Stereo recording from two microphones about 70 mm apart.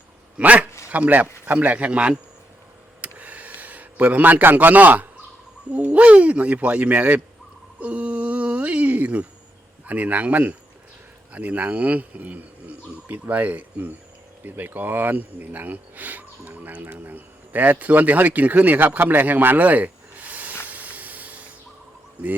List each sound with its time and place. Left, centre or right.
0.3 s a man's voice: centre
3.0 s a sound: right
5.7 s speech: right
7.8 s a sound: centre
9.8 s speech: right
20.7 s spray: right